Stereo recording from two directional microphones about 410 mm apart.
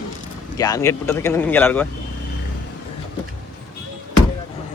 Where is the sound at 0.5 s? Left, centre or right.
Centre.